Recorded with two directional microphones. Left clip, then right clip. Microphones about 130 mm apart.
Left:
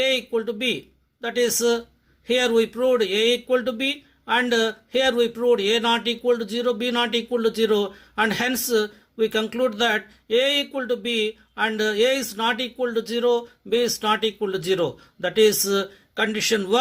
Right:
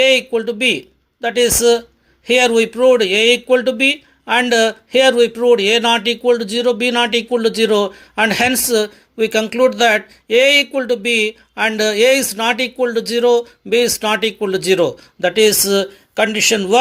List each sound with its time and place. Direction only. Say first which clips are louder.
0.0 s speech: right 9 dB; 30° right (ahead or behind)